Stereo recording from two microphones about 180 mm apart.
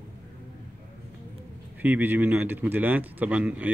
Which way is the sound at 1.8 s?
10° right (ahead or behind).